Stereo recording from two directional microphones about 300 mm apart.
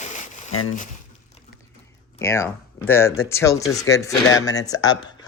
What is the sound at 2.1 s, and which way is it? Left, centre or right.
Speech, centre.